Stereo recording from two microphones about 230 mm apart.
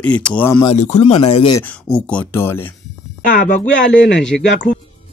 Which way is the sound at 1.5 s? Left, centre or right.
Centre.